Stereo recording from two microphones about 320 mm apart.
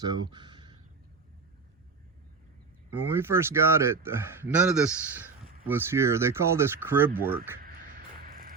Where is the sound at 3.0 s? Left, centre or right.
Centre.